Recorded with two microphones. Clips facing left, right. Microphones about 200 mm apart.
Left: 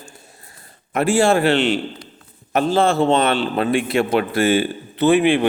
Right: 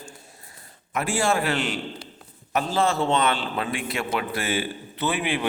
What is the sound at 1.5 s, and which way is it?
Speech, 25° left (ahead or behind).